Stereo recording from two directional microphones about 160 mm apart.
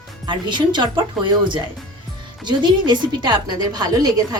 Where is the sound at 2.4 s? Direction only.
25° right (ahead or behind).